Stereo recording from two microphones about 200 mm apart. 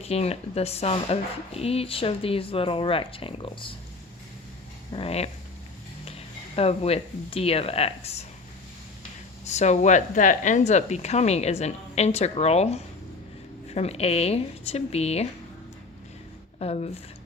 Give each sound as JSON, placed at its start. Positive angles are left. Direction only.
{"t": 0.0, "sound": "speech", "side_deg": 30}
{"t": 4.9, "sound": "speech", "side_deg": 30}
{"t": 6.6, "sound": "speech", "side_deg": 30}
{"t": 9.4, "sound": "speech", "side_deg": 35}
{"t": 16.6, "sound": "speech", "side_deg": 30}